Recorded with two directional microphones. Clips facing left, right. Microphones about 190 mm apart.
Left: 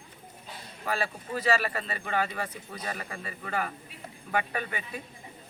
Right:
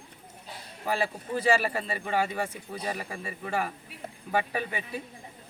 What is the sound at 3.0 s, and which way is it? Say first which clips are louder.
Speech: right 2 dB; 25° right (ahead or behind).